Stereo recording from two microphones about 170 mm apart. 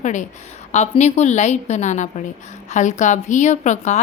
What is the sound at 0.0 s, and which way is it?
A woman's voice, 45° left (ahead or behind).